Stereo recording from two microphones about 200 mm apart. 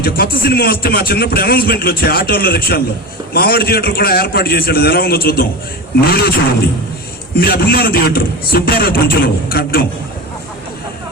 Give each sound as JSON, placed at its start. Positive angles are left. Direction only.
{"t": 0.0, "sound": "a man's voice", "side_deg": 50}
{"t": 7.3, "sound": "a man's voice", "side_deg": 50}